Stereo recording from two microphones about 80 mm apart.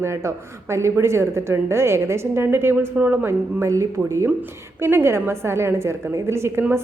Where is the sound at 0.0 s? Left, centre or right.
Right.